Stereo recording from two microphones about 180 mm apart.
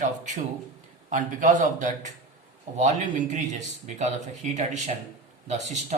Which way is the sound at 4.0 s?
40° right (ahead or behind).